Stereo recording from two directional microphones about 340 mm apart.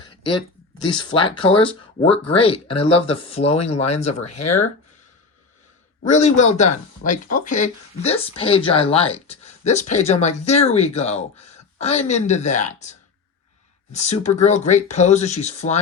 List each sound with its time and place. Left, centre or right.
0.0 s a sound: centre
1.1 s speech: centre
4.3 s speech: left
6.1 s speech: centre